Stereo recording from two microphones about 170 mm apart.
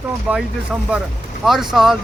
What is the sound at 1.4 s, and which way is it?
Speech, centre (ahead or behind).